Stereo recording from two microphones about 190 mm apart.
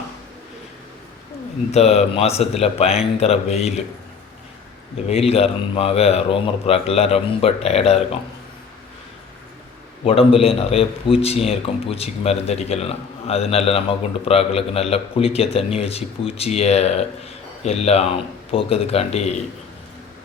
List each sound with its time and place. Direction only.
1.7 s a man's voice: 35° left (ahead or behind)
5.0 s a man's voice: 30° left (ahead or behind)
10.0 s a man's voice: 30° left (ahead or behind)